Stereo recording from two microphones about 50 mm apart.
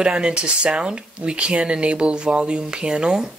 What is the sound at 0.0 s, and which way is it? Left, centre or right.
Speech, centre.